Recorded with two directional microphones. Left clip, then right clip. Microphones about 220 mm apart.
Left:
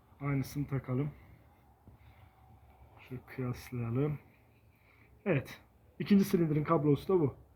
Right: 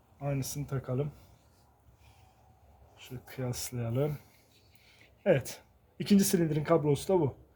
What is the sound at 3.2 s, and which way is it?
Speech, 55° right (ahead or behind).